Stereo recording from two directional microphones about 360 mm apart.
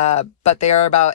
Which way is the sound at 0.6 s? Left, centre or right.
Left.